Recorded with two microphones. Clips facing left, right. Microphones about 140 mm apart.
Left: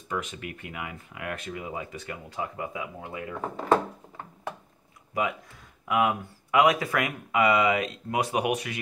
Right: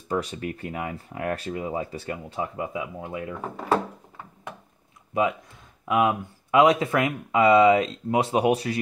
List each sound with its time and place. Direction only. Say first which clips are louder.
0.1 s speech: right 6 dB; 35° right (ahead or behind); by 3.3 s 20° right (ahead or behind)
5.1 s speech: right 5 dB; 25° right (ahead or behind)